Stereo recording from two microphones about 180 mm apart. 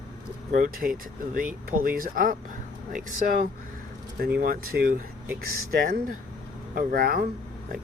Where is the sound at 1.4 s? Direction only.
50° right (ahead or behind).